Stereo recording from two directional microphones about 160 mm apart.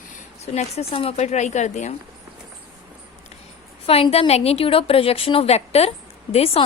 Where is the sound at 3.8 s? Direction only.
40° left (ahead or behind).